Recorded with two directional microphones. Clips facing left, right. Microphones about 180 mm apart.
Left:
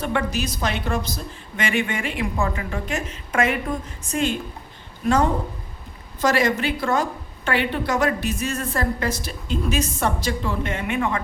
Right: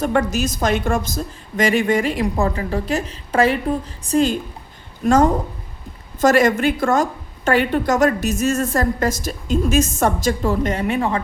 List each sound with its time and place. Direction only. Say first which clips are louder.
0.0 s a woman's voice: right 5 dB; 40° right (ahead or behind)